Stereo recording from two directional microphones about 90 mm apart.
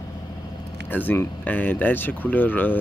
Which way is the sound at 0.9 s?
20° left (ahead or behind).